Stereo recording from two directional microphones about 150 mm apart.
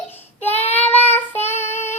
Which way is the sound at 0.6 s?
45° left (ahead or behind).